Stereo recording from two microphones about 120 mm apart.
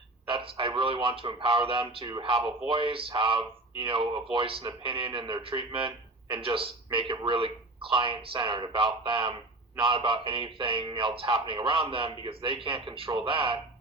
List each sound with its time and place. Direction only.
0.3 s a man's voice: 45° right (ahead or behind)